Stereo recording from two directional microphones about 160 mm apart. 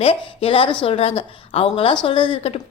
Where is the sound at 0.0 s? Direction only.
35° left (ahead or behind).